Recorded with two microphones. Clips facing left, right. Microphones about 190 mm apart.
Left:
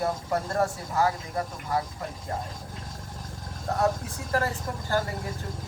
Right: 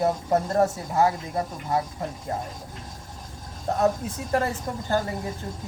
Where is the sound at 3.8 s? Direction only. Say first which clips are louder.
Right 3 dB; 20° right (ahead or behind).